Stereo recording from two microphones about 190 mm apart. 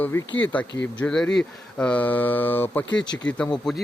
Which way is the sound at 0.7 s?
70° left (ahead or behind).